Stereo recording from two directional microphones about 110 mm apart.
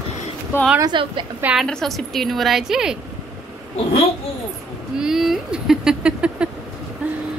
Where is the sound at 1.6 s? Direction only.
5° left (ahead or behind).